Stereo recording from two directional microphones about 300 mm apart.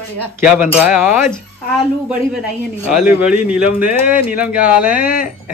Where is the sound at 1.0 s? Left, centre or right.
Left.